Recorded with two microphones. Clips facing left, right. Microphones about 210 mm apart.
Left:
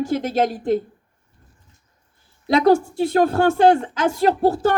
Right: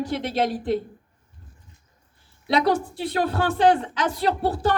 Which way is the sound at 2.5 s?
45° left (ahead or behind).